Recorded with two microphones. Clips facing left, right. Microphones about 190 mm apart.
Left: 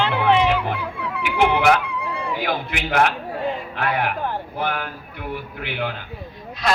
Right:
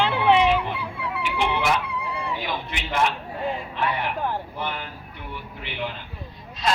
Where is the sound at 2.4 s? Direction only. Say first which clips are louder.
Left 6 dB; 75° left (ahead or behind).